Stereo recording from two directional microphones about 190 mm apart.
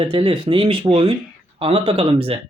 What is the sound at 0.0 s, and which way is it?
Speech, 25° right (ahead or behind).